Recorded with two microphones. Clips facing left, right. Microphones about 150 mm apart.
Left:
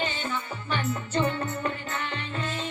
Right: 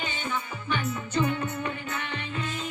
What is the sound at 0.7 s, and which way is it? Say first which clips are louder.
Music: left 1 dB; 30° left (ahead or behind).